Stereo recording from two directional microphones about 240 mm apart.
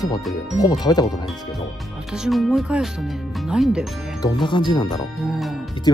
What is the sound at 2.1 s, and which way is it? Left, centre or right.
Speech, centre.